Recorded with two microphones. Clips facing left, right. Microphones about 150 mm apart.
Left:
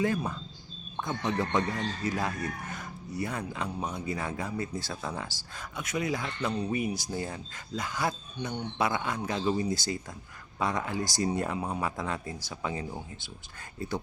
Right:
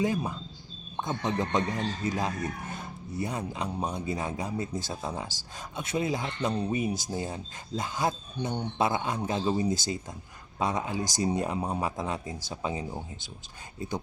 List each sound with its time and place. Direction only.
0.0 s a man's voice: 15° right (ahead or behind)